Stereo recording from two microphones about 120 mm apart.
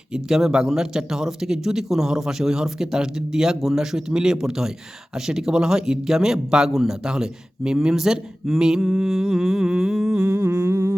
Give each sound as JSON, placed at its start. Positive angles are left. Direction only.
{"t": 0.1, "sound": "a man's voice", "side_deg": -5}
{"t": 10.2, "sound": "humming", "side_deg": -20}